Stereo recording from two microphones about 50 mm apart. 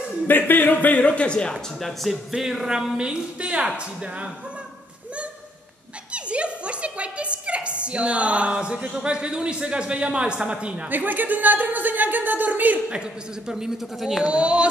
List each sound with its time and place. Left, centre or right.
0.3 s a man's voice: left; by 1.6 s centre
1.8 s speech: centre
2.3 s a man's voice: centre
3.0 s speech: centre
6.1 s a sound: right
7.8 s speech: right
10.9 s speech: right
12.9 s a man's voice: centre
14.2 s speech: right